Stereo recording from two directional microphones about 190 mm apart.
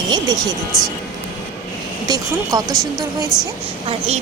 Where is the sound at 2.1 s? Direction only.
20° right (ahead or behind).